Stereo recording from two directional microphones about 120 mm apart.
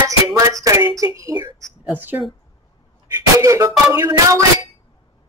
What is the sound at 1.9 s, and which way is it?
Speech, 15° right (ahead or behind).